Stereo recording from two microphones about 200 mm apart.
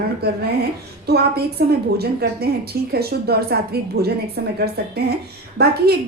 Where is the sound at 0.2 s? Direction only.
55° right (ahead or behind).